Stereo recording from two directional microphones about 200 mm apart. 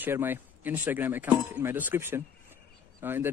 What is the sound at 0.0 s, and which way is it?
Speech, 10° right (ahead or behind).